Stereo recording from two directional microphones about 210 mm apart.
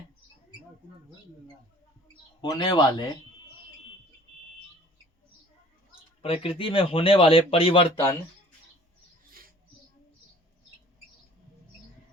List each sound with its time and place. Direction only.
2.4 s speech: 20° left (ahead or behind)
5.9 s speech: 25° left (ahead or behind)